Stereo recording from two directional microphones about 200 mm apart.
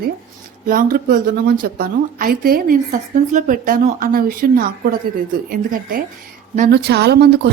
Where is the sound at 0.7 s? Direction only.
45° right (ahead or behind).